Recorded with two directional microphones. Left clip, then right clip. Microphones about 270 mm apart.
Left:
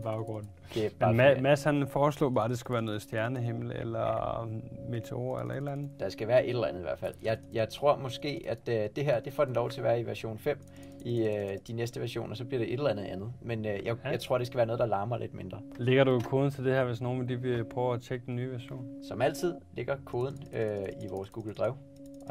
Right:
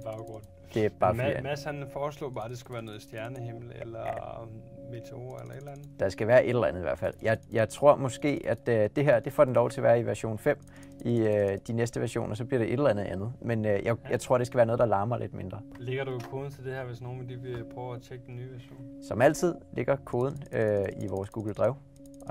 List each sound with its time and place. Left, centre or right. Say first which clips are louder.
0.7 s speech: right 3 dB; right
1.1 s speech: left 8 dB; left
5.9 s speech: right 5 dB; right
17.1 s speech: left 7 dB; left
19.0 s speech: right 6 dB; right